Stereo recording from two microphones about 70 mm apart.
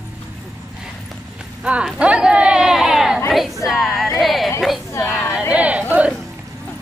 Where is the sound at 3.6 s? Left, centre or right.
Centre.